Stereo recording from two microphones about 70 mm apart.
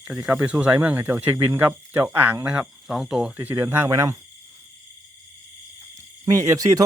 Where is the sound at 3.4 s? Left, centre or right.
Right.